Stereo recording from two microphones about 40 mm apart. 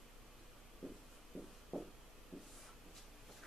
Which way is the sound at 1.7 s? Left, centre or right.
Centre.